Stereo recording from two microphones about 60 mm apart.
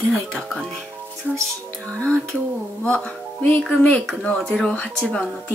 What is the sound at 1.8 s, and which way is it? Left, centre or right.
Speech, centre.